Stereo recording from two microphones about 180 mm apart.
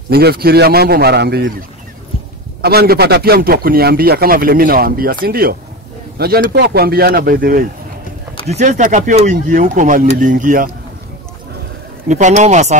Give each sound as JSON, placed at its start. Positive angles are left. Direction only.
{"t": 0.1, "sound": "a man's voice", "side_deg": -60}
{"t": 2.6, "sound": "a man's voice", "side_deg": -60}
{"t": 8.5, "sound": "speech", "side_deg": -40}
{"t": 12.1, "sound": "speech", "side_deg": -40}